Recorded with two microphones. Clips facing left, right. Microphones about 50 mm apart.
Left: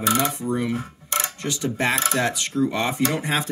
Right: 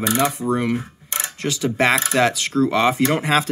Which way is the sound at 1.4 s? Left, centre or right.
Right.